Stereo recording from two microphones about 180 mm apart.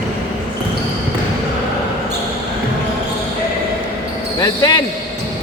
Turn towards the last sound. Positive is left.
turn(degrees=20)  # may be behind; listen again after turning